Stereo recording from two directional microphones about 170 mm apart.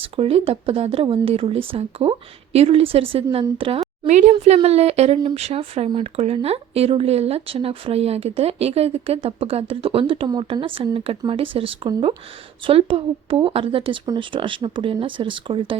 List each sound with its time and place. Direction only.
0.2 s speech: 35° right (ahead or behind)